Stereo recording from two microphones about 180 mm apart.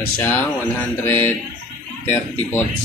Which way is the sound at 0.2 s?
10° left (ahead or behind).